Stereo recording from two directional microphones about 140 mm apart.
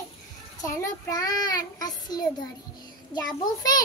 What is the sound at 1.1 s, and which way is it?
Child singing, 25° left (ahead or behind).